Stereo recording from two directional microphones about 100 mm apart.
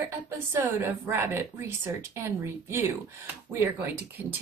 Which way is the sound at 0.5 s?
20° right (ahead or behind).